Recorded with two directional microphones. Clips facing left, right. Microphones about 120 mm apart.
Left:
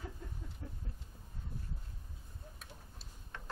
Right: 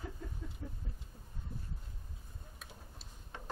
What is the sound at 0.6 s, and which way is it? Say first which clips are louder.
Speech: right 2 dB; 5° right (ahead or behind).